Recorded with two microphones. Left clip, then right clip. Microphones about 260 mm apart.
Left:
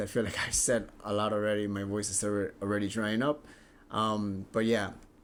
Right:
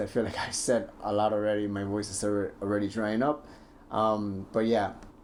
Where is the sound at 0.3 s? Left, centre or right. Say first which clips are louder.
Even; left.